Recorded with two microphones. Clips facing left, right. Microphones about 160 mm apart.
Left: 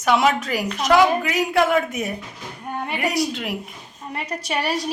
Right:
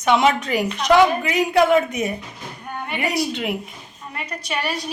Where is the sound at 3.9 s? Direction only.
35° left (ahead or behind).